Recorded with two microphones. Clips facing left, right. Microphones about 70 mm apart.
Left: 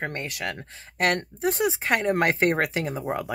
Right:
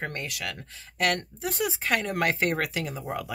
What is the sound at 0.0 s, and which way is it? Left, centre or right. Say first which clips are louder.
Speech: left 3 dB; left.